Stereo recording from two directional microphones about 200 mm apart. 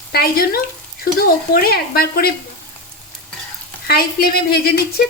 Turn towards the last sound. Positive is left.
turn(degrees=50)  # may be behind; listen again after turning